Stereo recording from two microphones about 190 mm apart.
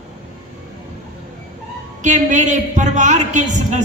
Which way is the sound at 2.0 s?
40° right (ahead or behind).